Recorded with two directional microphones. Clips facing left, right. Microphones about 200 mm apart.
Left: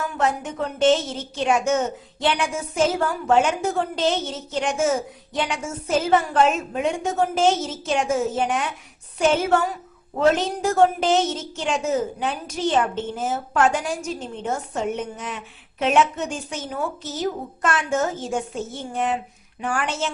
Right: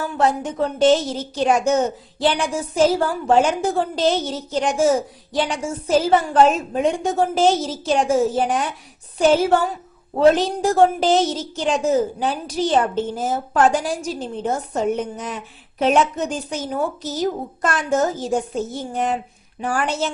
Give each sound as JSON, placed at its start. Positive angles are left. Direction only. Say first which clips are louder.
{"t": 0.0, "sound": "a woman's voice", "louder": "right 4 dB", "side_deg": -35}